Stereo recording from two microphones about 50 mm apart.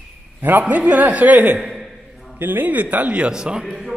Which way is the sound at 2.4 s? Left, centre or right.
Right.